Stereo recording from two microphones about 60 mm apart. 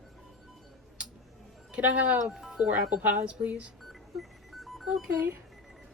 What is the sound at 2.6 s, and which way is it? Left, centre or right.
Speech, centre.